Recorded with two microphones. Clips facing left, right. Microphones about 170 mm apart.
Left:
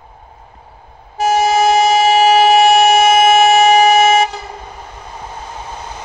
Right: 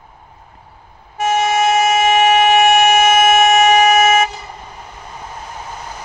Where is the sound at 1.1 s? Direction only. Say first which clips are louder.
Left 3 dB; 35° left (ahead or behind).